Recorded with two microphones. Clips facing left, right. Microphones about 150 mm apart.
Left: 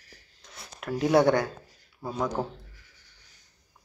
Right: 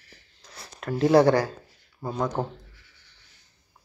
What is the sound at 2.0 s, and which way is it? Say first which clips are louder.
Speech: right 3 dB; 20° right (ahead or behind).